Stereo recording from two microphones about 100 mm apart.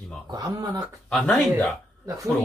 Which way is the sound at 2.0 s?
35° right (ahead or behind).